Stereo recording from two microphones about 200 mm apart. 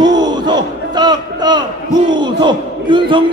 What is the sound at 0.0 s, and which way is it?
Crowd, 20° right (ahead or behind).